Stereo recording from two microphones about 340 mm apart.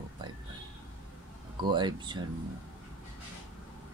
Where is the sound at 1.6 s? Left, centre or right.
Centre.